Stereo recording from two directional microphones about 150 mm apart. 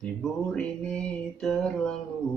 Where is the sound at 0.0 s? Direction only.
5° left (ahead or behind).